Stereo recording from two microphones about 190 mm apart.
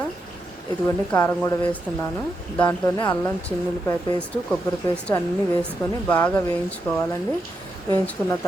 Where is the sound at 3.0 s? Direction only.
20° left (ahead or behind).